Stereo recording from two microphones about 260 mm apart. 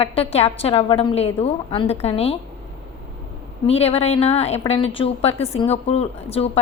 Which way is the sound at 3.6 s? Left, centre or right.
Left.